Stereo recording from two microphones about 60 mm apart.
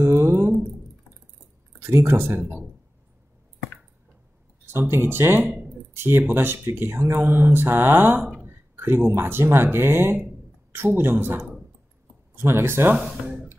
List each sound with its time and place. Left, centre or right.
0.0 s a sound: right
1.8 s speech: right
4.6 s speech: right
6.8 s mantra: right
8.5 s a sound: right
9.2 s mantra: right
10.1 s speech: right
12.5 s speech: right
12.9 s speech: centre
13.2 s speech: right